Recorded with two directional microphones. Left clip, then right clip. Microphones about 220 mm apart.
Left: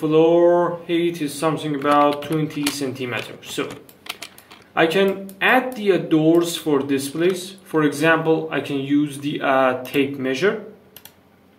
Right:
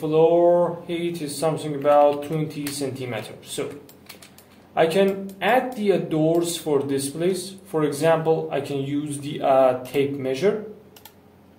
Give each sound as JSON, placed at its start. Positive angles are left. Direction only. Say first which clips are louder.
{"t": 0.0, "sound": "speech", "louder": "left 2 dB", "side_deg": 20}
{"t": 4.7, "sound": "speech", "louder": "left 2 dB", "side_deg": 20}